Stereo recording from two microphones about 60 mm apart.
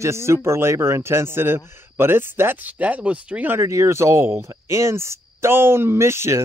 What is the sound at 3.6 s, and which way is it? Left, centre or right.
Speech, right.